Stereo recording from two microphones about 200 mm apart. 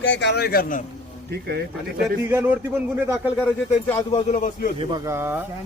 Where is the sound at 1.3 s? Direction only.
50° right (ahead or behind).